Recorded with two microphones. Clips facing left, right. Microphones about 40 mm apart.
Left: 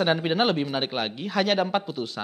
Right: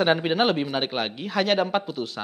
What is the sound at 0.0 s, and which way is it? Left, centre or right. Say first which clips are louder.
Speech: right 2 dB; centre.